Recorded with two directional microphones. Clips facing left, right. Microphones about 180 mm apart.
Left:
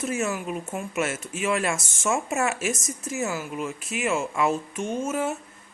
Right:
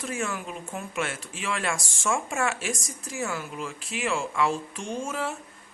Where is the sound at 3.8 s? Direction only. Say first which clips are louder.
Left 3 dB; 30° right (ahead or behind).